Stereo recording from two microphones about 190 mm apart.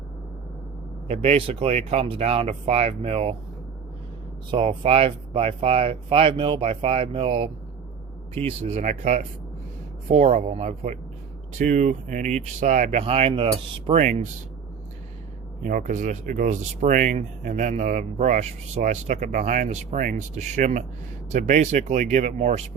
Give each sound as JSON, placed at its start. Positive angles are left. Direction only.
{"t": 1.0, "sound": "speech", "side_deg": -35}
{"t": 4.5, "sound": "speech", "side_deg": -30}
{"t": 15.6, "sound": "speech", "side_deg": -45}